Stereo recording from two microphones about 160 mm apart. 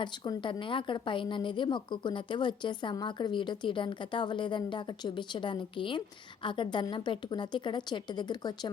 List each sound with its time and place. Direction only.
0.0 s a woman's voice: 30° left (ahead or behind)